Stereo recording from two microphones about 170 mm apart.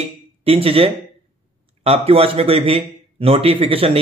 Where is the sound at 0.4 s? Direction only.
35° right (ahead or behind).